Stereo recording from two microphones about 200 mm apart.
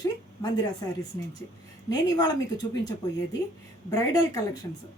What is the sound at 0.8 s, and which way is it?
Speech, 15° left (ahead or behind).